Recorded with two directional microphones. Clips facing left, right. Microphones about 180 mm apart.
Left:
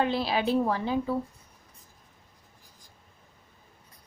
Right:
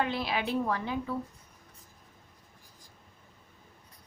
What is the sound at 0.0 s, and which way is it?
A woman's voice, 30° left (ahead or behind).